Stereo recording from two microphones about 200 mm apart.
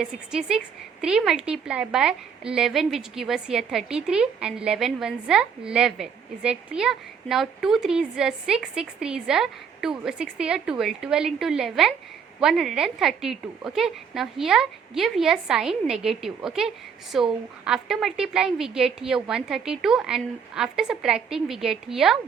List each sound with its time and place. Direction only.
0.0 s a woman's voice: 5° right (ahead or behind)